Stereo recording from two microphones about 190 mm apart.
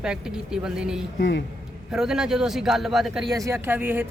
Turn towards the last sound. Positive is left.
turn(degrees=-10)  # may be behind; listen again after turning